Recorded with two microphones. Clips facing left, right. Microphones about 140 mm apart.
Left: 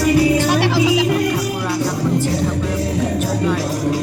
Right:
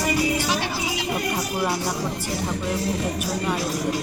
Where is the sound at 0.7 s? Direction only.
90° left.